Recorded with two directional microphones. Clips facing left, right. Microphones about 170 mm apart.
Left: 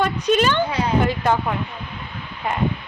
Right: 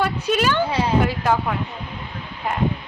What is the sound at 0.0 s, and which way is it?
A woman's voice, 5° right (ahead or behind).